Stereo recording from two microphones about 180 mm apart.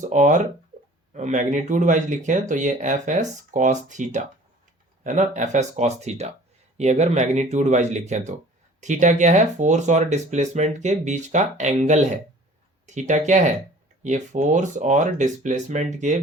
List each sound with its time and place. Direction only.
0.0 s speech: 45° right (ahead or behind)